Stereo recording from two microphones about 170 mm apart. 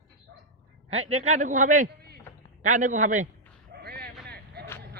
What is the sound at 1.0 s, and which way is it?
A man's voice, 40° right (ahead or behind).